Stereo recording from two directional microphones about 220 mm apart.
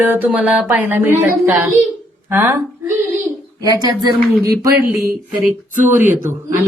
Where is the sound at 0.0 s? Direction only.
10° right (ahead or behind).